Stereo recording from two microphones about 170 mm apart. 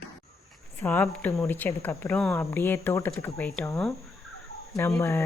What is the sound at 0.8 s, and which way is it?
Speech, 10° left (ahead or behind).